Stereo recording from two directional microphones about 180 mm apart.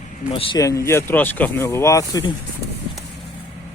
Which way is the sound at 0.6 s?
15° left (ahead or behind).